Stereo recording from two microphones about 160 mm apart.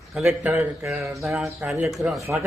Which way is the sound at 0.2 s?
10° right (ahead or behind).